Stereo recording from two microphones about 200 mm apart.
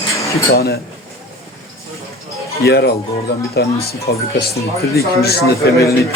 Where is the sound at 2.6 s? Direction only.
55° left (ahead or behind).